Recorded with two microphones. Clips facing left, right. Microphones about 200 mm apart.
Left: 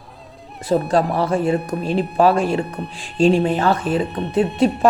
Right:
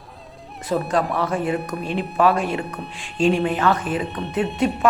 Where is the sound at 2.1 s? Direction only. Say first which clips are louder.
Left 3 dB; 35° left (ahead or behind).